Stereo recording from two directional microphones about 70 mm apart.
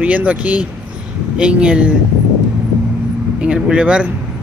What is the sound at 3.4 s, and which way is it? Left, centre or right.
Speech, centre.